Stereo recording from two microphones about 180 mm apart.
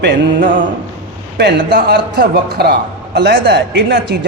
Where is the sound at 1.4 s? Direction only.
65° right (ahead or behind).